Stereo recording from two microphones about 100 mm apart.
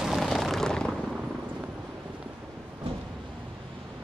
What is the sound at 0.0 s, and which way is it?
Vehicle, centre (ahead or behind).